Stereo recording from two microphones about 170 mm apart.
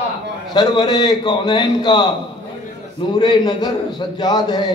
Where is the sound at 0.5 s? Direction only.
25° left (ahead or behind).